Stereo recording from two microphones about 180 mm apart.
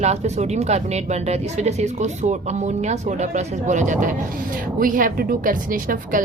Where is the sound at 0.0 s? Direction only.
40° right (ahead or behind).